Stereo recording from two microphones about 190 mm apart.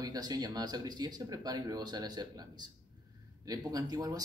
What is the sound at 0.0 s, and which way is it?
Speech, 20° right (ahead or behind).